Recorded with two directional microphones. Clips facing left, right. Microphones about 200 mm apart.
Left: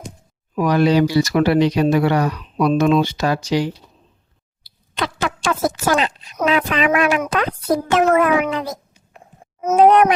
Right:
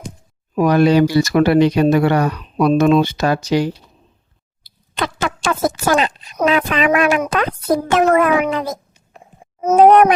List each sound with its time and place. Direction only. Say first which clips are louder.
0.5 s speech: right 3 dB; 50° right (ahead or behind)
4.9 s speech: right 1 dB; 50° right (ahead or behind)